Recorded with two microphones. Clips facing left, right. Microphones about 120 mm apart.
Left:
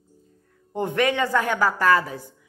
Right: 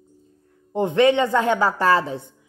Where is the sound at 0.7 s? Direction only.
20° right (ahead or behind).